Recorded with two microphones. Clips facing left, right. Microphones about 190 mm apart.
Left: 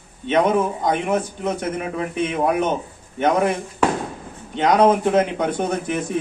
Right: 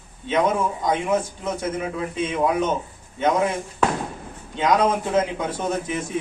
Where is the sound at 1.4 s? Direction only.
65° left (ahead or behind).